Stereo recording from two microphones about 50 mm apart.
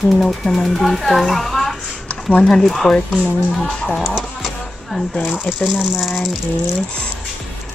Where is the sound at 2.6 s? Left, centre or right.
Centre.